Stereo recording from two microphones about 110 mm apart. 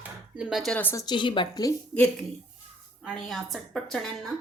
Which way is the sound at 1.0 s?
40° left (ahead or behind).